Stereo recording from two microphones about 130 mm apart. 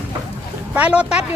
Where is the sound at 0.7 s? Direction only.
10° right (ahead or behind).